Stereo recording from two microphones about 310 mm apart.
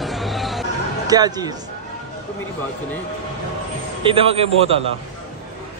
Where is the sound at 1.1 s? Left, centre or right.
Centre.